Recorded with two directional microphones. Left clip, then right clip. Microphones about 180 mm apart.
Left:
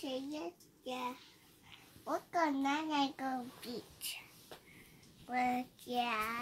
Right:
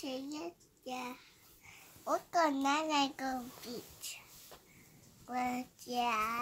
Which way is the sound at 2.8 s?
10° right (ahead or behind).